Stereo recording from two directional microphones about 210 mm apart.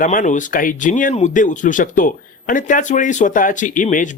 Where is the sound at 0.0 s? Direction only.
40° left (ahead or behind).